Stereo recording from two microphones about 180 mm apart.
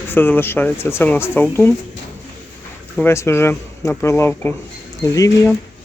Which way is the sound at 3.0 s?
15° left (ahead or behind).